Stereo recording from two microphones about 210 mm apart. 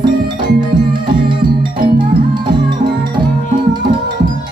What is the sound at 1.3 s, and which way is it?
Music, 25° right (ahead or behind).